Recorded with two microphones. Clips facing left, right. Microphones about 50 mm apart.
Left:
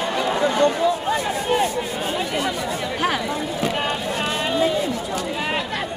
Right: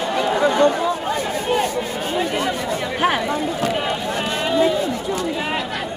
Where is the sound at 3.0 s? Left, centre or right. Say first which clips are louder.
Right 4 dB; right.